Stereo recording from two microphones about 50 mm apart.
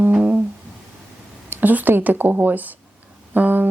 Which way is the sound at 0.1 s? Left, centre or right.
Right.